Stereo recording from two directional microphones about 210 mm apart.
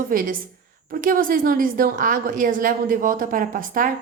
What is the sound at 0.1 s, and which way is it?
A woman's voice, 40° right (ahead or behind).